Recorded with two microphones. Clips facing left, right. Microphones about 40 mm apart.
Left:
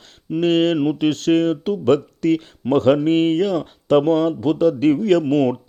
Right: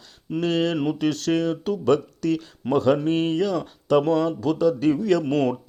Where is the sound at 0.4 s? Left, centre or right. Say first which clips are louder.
Left 6 dB; left.